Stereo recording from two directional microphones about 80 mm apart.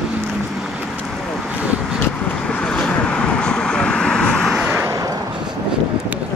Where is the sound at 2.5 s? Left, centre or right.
Centre.